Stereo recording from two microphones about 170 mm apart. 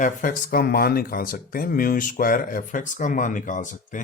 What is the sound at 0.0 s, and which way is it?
Speech, 55° left (ahead or behind).